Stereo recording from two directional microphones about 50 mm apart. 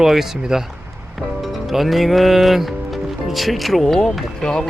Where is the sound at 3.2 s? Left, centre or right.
Centre.